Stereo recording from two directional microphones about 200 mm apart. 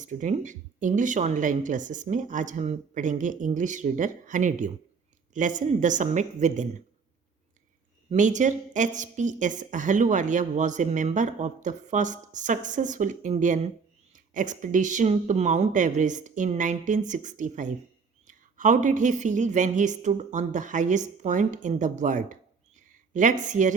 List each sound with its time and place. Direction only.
0.0 s a woman's voice: 40° right (ahead or behind)
8.1 s a woman's voice: 40° right (ahead or behind)